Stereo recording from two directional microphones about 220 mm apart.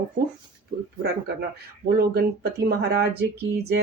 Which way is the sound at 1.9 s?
45° right (ahead or behind).